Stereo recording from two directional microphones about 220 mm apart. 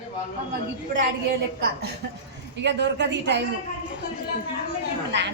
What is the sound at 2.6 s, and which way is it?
Speech, 50° right (ahead or behind).